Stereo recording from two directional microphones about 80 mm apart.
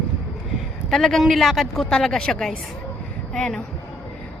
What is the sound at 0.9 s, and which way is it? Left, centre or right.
A woman's voice, centre.